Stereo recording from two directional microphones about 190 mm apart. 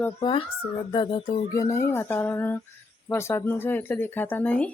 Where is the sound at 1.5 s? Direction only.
15° left (ahead or behind).